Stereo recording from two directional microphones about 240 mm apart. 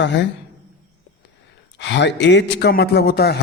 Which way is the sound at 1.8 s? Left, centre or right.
Left.